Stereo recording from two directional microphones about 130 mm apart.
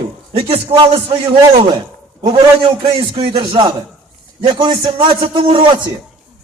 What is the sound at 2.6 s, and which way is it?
A man's voice, 45° right (ahead or behind).